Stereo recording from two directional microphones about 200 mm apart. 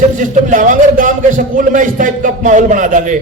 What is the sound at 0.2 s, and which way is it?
A man's voice, 40° right (ahead or behind).